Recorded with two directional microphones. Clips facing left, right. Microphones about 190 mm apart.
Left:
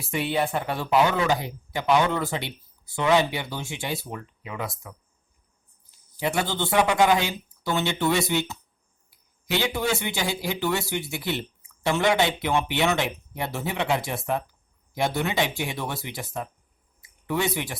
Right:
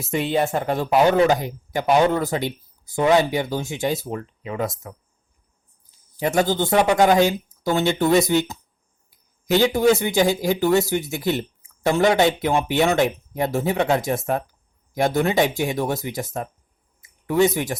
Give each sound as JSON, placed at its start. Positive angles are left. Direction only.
{"t": 0.0, "sound": "speech", "side_deg": -45}
{"t": 6.1, "sound": "speech", "side_deg": -40}
{"t": 17.0, "sound": "a sound", "side_deg": -45}